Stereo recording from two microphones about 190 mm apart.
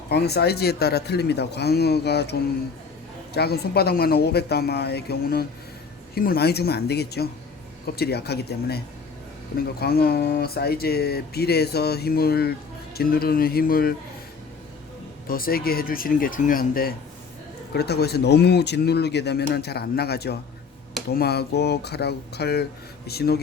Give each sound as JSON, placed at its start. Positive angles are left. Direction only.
{"t": 0.1, "sound": "speech", "side_deg": 60}
{"t": 3.3, "sound": "speech", "side_deg": 55}
{"t": 9.8, "sound": "speech", "side_deg": 55}
{"t": 15.3, "sound": "speech", "side_deg": 50}